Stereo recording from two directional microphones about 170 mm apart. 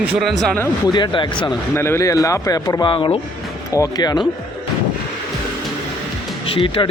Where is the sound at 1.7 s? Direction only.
15° left (ahead or behind).